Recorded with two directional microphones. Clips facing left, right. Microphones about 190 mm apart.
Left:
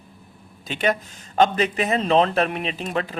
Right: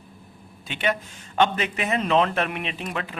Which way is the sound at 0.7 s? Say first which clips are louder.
Left 3 dB; 40° left (ahead or behind).